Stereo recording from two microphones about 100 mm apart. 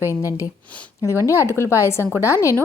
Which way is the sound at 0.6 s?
15° left (ahead or behind).